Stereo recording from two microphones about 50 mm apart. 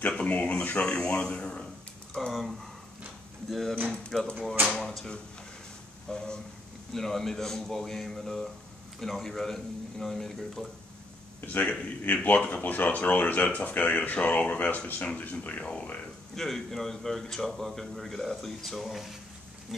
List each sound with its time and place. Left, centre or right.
0.1 s speech: left
2.3 s speech: centre
6.1 s a man's voice: centre
11.4 s speech: left
12.6 s speech: left
16.3 s speech: centre